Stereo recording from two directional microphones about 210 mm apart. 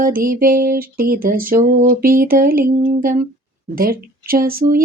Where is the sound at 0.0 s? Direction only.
40° right (ahead or behind).